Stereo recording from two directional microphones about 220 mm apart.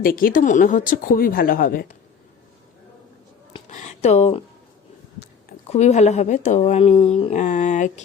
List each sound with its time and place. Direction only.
0.0 s speech: 40° left (ahead or behind)
3.5 s a sound: 30° left (ahead or behind)
5.6 s speech: 30° left (ahead or behind)